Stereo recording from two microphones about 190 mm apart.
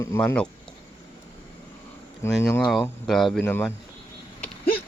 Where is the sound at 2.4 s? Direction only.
15° left (ahead or behind).